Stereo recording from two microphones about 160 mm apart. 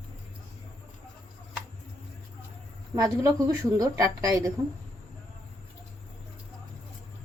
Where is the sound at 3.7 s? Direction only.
20° right (ahead or behind).